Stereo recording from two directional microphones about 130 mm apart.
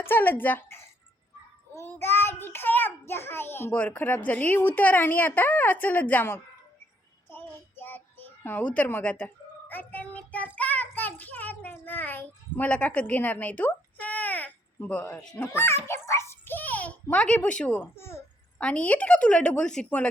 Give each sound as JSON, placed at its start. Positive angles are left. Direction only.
{"t": 0.0, "sound": "a child's voice", "side_deg": 15}
{"t": 7.3, "sound": "child singing", "side_deg": 15}
{"t": 15.4, "sound": "a child's voice", "side_deg": 20}
{"t": 18.6, "sound": "a child's voice", "side_deg": 10}